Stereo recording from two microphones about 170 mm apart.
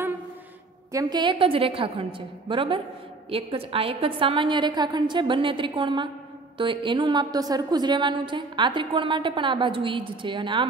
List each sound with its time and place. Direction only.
0.9 s a woman's voice: 25° right (ahead or behind)